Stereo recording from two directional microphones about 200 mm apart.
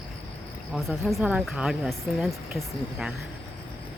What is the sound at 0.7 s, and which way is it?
Speech, centre (ahead or behind).